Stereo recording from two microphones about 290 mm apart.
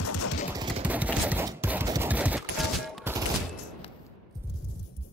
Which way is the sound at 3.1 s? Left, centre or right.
Centre.